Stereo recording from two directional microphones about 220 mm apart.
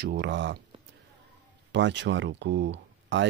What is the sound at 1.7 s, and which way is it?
Speech, 55° right (ahead or behind).